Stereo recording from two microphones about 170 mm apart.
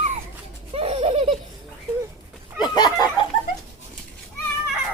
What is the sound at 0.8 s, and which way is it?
Laughter, 35° right (ahead or behind).